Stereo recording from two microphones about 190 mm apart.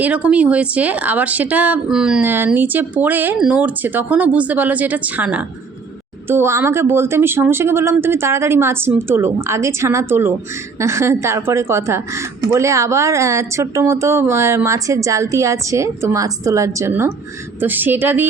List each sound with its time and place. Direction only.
0.0 s speech: 5° right (ahead or behind)